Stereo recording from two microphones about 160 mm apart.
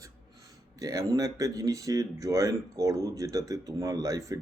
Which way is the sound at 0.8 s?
20° right (ahead or behind).